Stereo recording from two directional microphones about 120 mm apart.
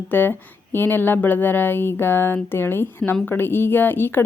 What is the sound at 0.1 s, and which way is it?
A woman's voice, 15° left (ahead or behind).